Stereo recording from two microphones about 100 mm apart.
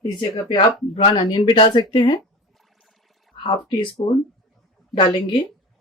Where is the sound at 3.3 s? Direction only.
55° left (ahead or behind).